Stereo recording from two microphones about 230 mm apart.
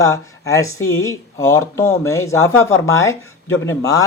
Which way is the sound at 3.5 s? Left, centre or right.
Left.